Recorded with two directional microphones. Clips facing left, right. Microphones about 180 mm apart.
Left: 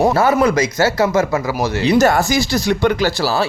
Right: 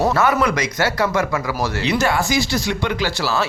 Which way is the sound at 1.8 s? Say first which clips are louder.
Left 7 dB; 40° left (ahead or behind).